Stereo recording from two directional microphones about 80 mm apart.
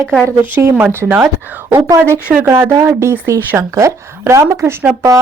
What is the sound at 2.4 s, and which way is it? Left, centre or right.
A woman's voice, right.